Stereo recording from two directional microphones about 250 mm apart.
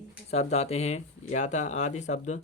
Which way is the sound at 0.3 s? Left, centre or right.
Left.